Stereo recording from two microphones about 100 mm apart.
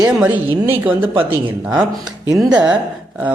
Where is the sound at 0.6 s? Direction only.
20° right (ahead or behind).